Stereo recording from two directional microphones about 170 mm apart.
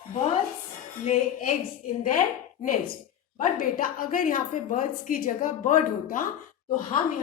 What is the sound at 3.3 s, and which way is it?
A woman's voice, 55° left (ahead or behind).